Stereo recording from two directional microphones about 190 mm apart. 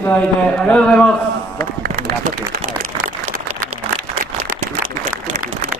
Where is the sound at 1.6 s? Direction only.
50° right (ahead or behind).